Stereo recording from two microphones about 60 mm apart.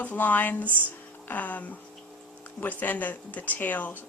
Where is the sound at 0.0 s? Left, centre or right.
Left.